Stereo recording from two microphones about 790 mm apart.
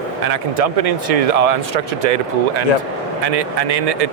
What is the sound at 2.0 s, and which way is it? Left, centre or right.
Speech, right.